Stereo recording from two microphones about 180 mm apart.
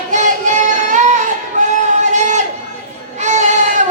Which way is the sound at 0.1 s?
40° right (ahead or behind).